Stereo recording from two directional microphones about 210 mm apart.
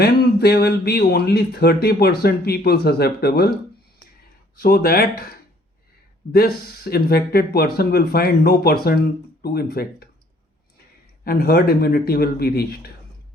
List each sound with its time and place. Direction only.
0.0 s speech: 50° left (ahead or behind)
4.6 s speech: 45° left (ahead or behind)
6.3 s speech: 45° left (ahead or behind)
11.2 s speech: 45° left (ahead or behind)